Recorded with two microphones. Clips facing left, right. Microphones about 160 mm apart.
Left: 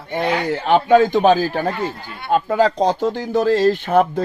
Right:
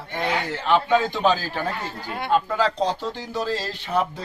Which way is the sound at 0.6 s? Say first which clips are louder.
Left 7 dB; 55° left (ahead or behind).